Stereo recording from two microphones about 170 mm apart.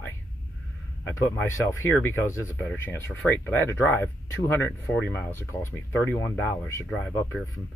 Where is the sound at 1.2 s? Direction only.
15° left (ahead or behind).